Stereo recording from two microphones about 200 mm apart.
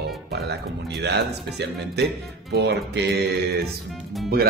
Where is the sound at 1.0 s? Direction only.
55° right (ahead or behind).